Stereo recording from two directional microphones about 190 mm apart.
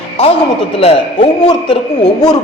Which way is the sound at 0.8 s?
30° left (ahead or behind).